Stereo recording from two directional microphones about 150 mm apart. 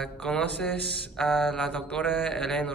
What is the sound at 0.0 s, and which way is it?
Speech, 5° left (ahead or behind).